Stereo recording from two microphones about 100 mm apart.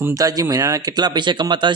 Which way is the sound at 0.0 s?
35° right (ahead or behind).